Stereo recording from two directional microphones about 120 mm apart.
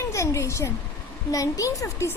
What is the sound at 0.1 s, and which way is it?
A woman's voice, 25° left (ahead or behind).